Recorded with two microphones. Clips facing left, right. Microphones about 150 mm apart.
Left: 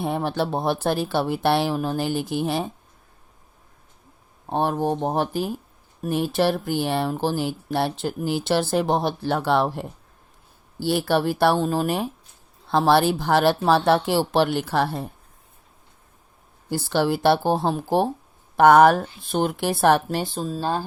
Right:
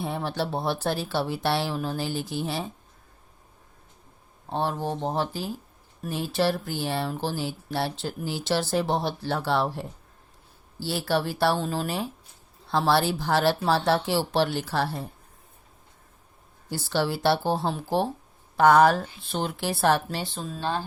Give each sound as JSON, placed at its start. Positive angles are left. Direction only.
{"t": 0.0, "sound": "speech", "side_deg": 55}
{"t": 4.4, "sound": "speech", "side_deg": 55}
{"t": 16.6, "sound": "speech", "side_deg": 50}